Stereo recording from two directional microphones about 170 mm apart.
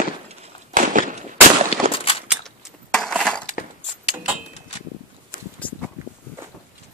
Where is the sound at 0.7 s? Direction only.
50° right (ahead or behind).